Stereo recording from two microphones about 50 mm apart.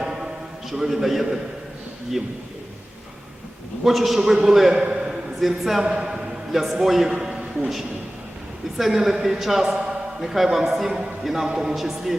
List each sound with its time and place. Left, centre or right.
0.0 s a sound: centre
0.7 s speech: centre
3.8 s a man's voice: centre
5.4 s speech: centre
5.8 s a man's voice: centre
7.3 s a sound: right
8.8 s a man's voice: centre